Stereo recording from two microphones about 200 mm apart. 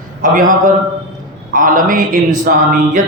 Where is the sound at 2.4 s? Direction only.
40° right (ahead or behind).